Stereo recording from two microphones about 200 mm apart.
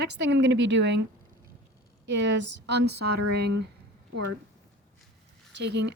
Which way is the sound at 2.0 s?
65° right (ahead or behind).